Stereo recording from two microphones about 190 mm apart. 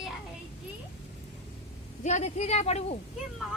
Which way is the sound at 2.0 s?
40° left (ahead or behind).